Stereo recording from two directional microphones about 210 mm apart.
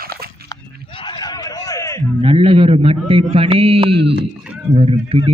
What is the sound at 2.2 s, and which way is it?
A man's voice, 25° right (ahead or behind).